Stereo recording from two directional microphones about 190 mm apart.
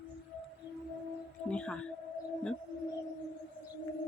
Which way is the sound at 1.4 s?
5° left (ahead or behind).